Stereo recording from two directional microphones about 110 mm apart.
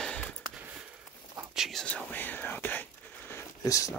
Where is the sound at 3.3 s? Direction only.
30° left (ahead or behind).